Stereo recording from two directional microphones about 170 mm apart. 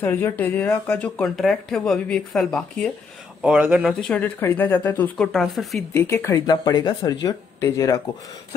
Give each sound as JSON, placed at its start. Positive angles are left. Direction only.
{"t": 0.0, "sound": "speech", "side_deg": 10}
{"t": 3.4, "sound": "speech", "side_deg": -10}
{"t": 4.0, "sound": "speech", "side_deg": 10}
{"t": 5.9, "sound": "speech", "side_deg": 15}